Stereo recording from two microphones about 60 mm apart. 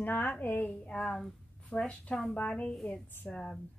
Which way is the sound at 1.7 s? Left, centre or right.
Centre.